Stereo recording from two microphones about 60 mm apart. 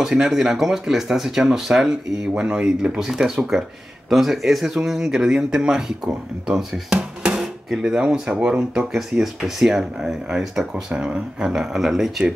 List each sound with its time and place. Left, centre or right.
0.0 s speech: centre
7.0 s speech: centre